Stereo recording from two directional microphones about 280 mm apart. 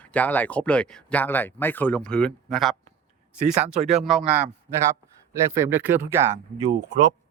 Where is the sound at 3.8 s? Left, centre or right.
Centre.